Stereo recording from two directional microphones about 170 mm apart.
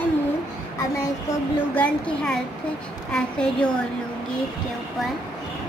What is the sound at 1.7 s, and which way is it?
A woman's voice, 10° left (ahead or behind).